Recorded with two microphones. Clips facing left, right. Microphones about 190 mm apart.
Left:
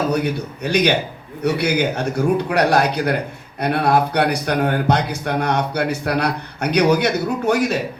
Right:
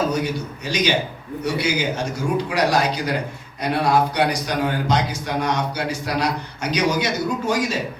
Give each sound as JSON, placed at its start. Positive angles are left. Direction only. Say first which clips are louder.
{"t": 0.1, "sound": "speech", "louder": "left 3 dB", "side_deg": 60}